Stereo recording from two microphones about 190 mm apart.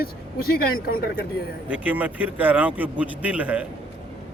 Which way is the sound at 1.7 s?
10° right (ahead or behind).